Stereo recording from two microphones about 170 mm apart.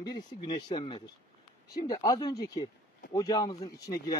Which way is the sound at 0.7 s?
30° left (ahead or behind).